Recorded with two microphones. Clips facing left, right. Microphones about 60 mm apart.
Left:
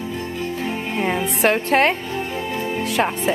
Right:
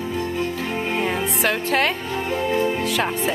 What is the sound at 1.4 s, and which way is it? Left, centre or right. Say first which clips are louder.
Speech: left 5 dB; left.